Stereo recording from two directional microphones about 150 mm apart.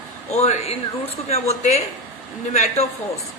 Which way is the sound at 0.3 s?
45° left (ahead or behind).